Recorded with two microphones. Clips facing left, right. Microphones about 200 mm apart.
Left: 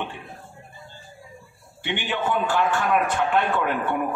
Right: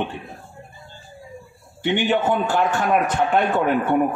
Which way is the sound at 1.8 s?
45° right (ahead or behind).